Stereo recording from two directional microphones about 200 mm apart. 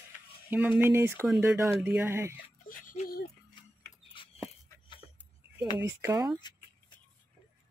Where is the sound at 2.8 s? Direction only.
45° left (ahead or behind).